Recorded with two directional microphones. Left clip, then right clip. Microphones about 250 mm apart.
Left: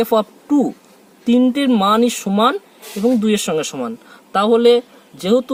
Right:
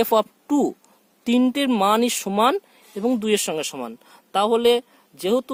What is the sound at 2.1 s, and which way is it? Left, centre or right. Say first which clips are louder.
Speech: left 3 dB; right.